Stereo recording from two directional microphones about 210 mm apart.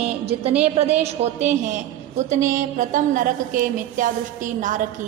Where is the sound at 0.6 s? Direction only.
30° right (ahead or behind).